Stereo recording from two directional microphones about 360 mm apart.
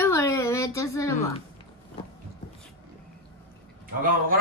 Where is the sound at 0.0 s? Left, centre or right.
Centre.